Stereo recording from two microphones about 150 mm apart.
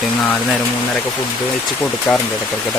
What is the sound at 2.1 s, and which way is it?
Speech, 10° left (ahead or behind).